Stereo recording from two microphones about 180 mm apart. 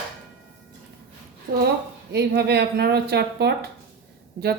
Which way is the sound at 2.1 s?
65° right (ahead or behind).